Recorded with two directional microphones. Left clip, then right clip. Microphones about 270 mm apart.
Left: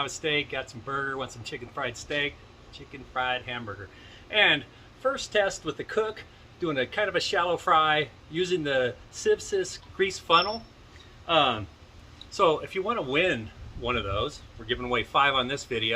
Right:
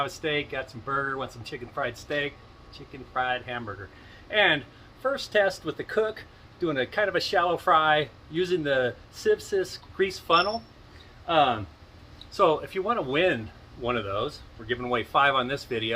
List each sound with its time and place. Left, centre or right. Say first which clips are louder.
0.0 s speech: even; centre